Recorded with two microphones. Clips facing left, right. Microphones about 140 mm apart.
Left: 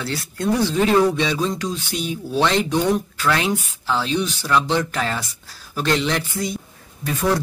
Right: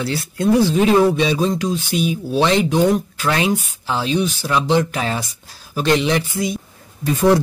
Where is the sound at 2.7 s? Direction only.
20° right (ahead or behind).